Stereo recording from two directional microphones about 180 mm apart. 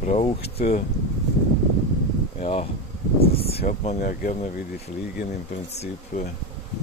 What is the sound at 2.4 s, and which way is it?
Speech, 35° left (ahead or behind).